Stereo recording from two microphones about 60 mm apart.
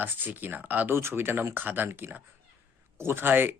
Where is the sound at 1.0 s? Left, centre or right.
Right.